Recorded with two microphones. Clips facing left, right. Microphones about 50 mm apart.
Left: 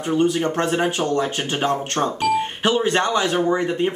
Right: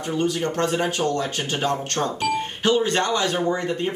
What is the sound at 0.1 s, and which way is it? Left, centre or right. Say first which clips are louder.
Speech: left 4 dB; centre.